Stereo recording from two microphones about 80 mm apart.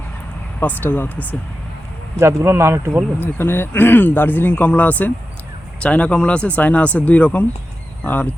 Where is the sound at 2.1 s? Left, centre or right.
Right.